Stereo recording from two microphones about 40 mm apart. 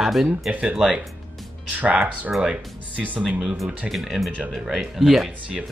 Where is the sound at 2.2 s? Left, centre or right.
Centre.